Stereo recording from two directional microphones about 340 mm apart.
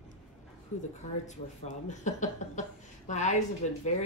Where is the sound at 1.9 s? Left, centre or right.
Left.